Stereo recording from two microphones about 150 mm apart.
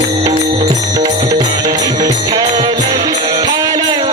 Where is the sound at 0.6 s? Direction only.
50° right (ahead or behind).